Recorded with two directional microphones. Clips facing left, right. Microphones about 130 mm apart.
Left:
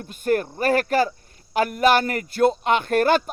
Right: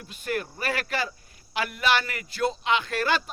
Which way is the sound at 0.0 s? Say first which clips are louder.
Left 9 dB; 45° left (ahead or behind).